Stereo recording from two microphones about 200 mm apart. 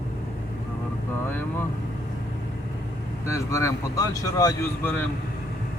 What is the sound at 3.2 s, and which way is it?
Speech, 15° left (ahead or behind).